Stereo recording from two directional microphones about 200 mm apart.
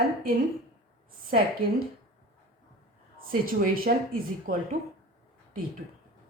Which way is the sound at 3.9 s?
50° right (ahead or behind).